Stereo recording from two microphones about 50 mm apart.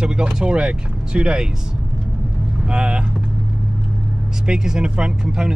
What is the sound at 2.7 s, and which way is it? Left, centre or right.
Speech, centre.